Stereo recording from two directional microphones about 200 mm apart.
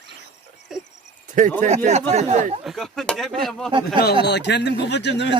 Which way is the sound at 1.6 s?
35° right (ahead or behind).